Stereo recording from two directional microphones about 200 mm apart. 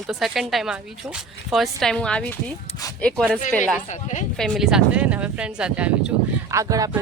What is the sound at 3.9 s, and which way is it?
Speech, 35° left (ahead or behind).